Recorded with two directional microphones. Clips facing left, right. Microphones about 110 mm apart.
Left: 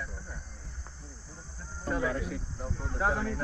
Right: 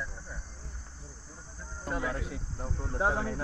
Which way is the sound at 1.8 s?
5° right (ahead or behind).